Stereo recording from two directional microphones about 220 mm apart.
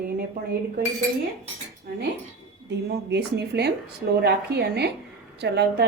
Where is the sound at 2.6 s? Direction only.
50° right (ahead or behind).